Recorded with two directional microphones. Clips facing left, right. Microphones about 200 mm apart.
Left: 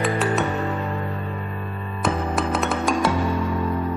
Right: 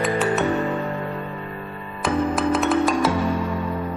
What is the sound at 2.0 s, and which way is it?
Music, centre (ahead or behind).